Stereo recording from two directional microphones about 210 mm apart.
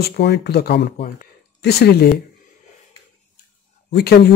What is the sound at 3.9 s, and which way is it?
Speech, 45° left (ahead or behind).